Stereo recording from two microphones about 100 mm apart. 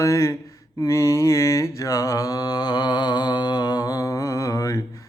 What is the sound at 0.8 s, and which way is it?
Mantra, 30° left (ahead or behind).